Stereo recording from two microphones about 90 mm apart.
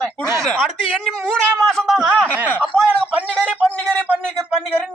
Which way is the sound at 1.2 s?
10° left (ahead or behind).